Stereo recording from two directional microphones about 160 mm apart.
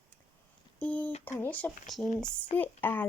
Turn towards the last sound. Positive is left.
turn(degrees=15)  # may be behind; listen again after turning